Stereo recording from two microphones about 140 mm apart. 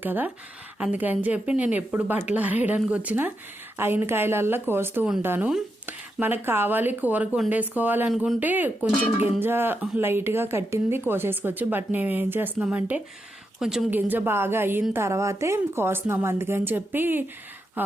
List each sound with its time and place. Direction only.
0.0 s a woman's voice: 15° right (ahead or behind)
8.1 s speech: centre (ahead or behind)
8.4 s a woman's voice: 10° right (ahead or behind)